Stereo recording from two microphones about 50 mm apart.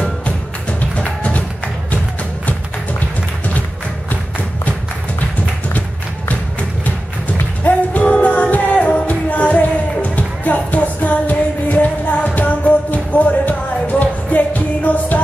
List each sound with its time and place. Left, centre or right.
0.7 s music: left
7.6 s music: left